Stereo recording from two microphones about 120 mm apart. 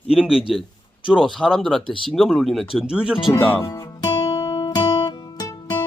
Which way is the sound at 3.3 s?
20° left (ahead or behind).